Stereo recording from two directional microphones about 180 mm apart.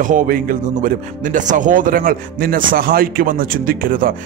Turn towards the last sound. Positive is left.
turn(degrees=-50)  # may be behind; listen again after turning